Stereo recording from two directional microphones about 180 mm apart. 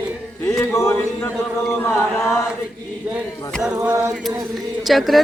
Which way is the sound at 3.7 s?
15° right (ahead or behind).